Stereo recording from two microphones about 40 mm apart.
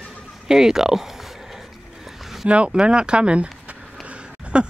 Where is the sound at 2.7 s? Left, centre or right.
Right.